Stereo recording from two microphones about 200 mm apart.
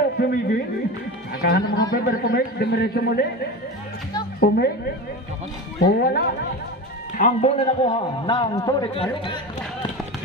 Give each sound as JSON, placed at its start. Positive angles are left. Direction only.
{"t": 0.2, "sound": "a man's voice", "side_deg": 50}
{"t": 4.4, "sound": "a woman's voice", "side_deg": 50}
{"t": 5.8, "sound": "a man's voice", "side_deg": 50}
{"t": 7.2, "sound": "a man's voice", "side_deg": 35}
{"t": 7.8, "sound": "speech", "side_deg": 20}